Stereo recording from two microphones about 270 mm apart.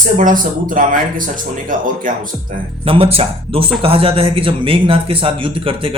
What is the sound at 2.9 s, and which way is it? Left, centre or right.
Speech, right.